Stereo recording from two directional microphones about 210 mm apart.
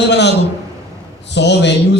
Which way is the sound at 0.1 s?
55° left (ahead or behind).